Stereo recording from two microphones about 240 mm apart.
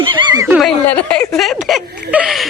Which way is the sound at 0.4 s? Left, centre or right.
Centre.